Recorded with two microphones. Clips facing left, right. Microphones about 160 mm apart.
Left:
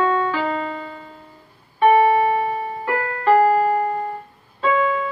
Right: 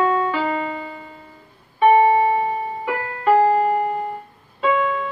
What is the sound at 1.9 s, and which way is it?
Music, 25° right (ahead or behind).